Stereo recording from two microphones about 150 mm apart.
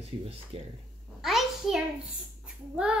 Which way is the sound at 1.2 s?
Centre (ahead or behind).